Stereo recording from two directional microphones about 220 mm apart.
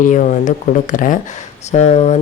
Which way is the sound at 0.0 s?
35° left (ahead or behind).